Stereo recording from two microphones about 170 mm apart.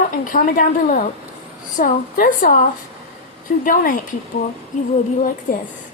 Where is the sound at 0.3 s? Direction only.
50° left (ahead or behind).